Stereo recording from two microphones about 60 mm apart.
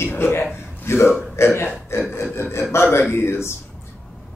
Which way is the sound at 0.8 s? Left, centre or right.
Left.